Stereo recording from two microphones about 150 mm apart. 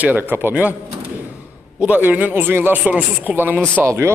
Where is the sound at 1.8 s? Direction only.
10° right (ahead or behind).